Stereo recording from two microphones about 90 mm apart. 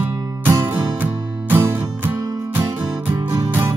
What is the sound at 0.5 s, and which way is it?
Music, 20° right (ahead or behind).